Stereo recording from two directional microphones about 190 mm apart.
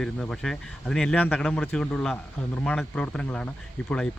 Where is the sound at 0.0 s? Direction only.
5° left (ahead or behind).